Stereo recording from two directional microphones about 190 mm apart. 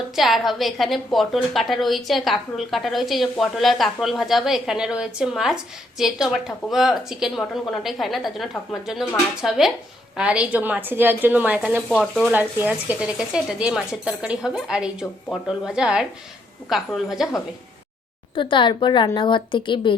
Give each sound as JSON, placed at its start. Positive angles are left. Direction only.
{"t": 0.2, "sound": "a woman's voice", "side_deg": 0}
{"t": 11.9, "sound": "a woman's voice", "side_deg": 0}
{"t": 12.3, "sound": "a woman's voice", "side_deg": -10}
{"t": 18.3, "sound": "a woman's voice", "side_deg": 25}